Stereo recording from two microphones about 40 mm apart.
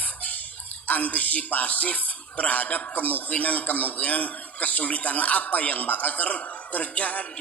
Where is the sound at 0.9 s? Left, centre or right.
Left.